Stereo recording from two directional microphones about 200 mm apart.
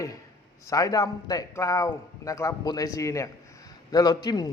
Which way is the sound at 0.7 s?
20° left (ahead or behind).